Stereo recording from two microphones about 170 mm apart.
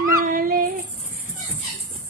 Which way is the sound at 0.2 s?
55° right (ahead or behind).